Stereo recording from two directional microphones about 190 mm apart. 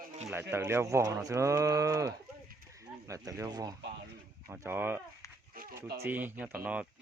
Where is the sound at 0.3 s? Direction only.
10° right (ahead or behind).